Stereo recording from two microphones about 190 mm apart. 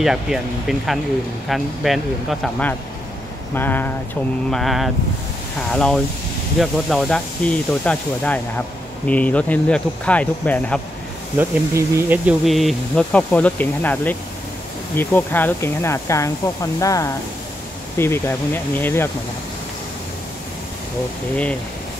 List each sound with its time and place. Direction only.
0.0 s speech: centre (ahead or behind)
11.3 s speech: 10° right (ahead or behind); by 19.0 s 10° left (ahead or behind)